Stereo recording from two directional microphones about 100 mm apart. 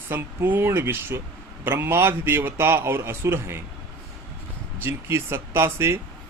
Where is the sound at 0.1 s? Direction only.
20° right (ahead or behind).